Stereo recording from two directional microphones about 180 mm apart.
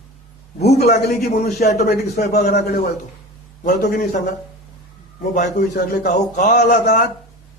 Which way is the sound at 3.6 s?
45° left (ahead or behind).